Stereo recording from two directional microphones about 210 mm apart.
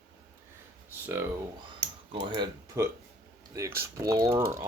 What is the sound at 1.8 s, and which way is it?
Typing, 50° right (ahead or behind).